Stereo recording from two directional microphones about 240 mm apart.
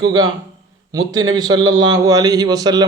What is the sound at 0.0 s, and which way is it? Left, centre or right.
A man's voice, centre.